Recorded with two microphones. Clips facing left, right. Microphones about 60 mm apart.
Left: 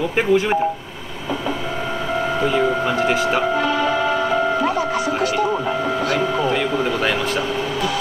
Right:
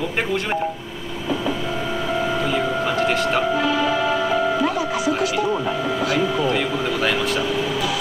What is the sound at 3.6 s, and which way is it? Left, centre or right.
Music, left.